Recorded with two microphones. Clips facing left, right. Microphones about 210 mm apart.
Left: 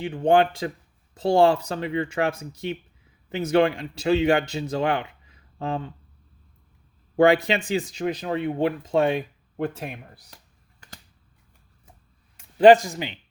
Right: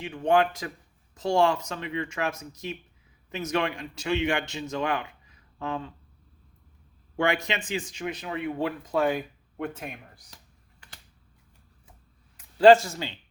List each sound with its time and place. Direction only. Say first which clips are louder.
0.0 s speech: left 4 dB; 30° left (ahead or behind)
7.4 s speech: left 7 dB; 35° left (ahead or behind)
10.3 s computer keyboard: left 2 dB; 40° left (ahead or behind)
12.4 s speech: left 2 dB; 20° left (ahead or behind)